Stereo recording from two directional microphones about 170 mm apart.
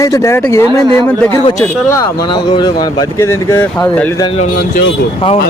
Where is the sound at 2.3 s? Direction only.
25° left (ahead or behind); by 4.1 s 10° left (ahead or behind).